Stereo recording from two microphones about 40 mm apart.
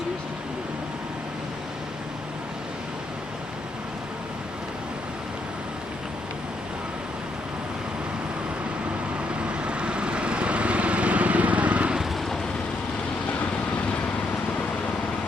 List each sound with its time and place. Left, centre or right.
9.4 s vehicle: right